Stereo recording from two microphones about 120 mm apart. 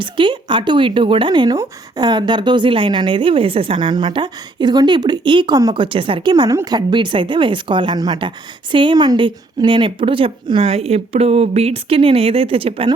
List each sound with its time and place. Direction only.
0.0 s speech: 40° right (ahead or behind)